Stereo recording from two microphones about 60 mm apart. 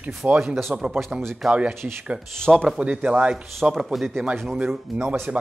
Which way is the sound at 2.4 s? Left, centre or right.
Centre.